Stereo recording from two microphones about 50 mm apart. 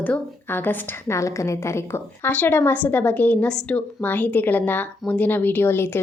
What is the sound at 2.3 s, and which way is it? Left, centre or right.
A woman's voice, left.